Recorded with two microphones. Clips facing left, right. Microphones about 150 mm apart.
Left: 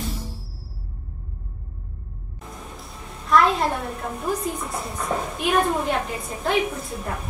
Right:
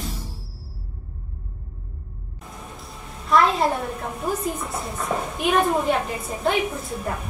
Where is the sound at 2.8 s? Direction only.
Centre (ahead or behind).